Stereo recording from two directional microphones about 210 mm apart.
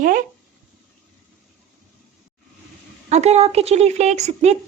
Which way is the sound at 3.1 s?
30° right (ahead or behind).